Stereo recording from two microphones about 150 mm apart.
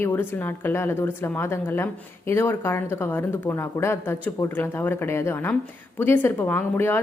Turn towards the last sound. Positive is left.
turn(degrees=15)  # may be behind; listen again after turning